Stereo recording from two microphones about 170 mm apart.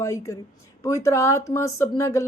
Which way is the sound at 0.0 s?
15° left (ahead or behind).